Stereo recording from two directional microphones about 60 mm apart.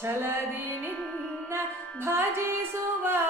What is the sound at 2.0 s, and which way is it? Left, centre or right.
Music, right.